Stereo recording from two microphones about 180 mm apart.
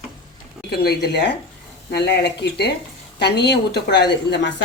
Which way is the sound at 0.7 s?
65° left (ahead or behind).